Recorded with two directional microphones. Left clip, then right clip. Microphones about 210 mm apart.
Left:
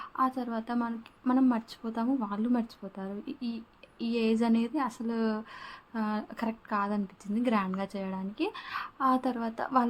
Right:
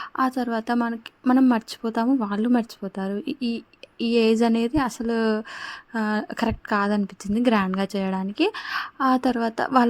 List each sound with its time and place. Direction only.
0.0 s speech: 35° right (ahead or behind)